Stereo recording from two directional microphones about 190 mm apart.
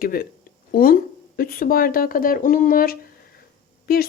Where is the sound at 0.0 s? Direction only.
50° left (ahead or behind).